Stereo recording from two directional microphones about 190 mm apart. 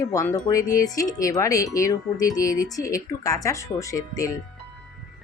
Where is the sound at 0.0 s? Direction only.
15° left (ahead or behind).